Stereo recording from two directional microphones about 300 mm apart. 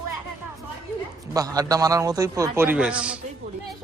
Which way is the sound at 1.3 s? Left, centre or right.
Centre.